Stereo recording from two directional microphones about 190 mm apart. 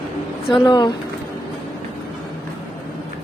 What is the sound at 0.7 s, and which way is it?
Speech, 25° left (ahead or behind).